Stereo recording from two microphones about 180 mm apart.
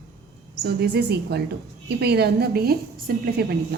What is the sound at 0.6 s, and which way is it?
A woman's voice, 65° right (ahead or behind).